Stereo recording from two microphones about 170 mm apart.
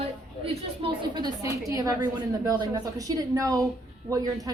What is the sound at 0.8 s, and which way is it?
A woman's voice, 30° right (ahead or behind).